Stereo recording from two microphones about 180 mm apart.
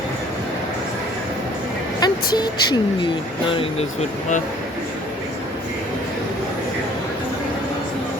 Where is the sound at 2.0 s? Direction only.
25° left (ahead or behind).